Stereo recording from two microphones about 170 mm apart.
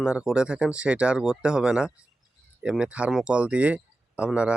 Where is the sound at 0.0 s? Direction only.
5° right (ahead or behind).